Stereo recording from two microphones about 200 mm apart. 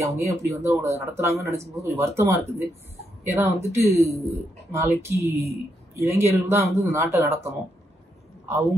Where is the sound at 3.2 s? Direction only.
10° right (ahead or behind).